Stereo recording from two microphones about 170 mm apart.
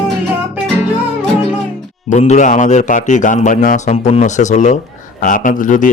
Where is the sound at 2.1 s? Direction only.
40° left (ahead or behind).